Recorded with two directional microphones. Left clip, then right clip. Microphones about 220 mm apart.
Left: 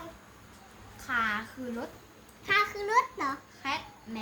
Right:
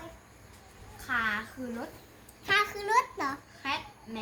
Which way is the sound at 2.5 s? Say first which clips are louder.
Even; 25° right (ahead or behind).